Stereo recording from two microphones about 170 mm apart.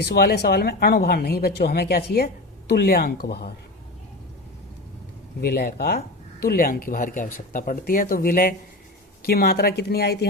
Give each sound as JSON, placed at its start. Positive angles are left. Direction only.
{"t": 0.0, "sound": "speech", "side_deg": 70}
{"t": 5.4, "sound": "speech", "side_deg": 60}